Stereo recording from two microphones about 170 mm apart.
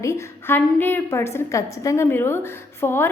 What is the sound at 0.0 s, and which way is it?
A woman's voice, 15° left (ahead or behind).